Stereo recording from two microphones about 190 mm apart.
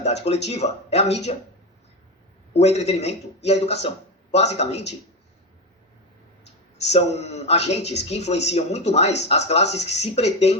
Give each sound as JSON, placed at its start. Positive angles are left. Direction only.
{"t": 0.0, "sound": "speech", "side_deg": 35}
{"t": 2.5, "sound": "speech", "side_deg": 35}
{"t": 6.9, "sound": "speech", "side_deg": 35}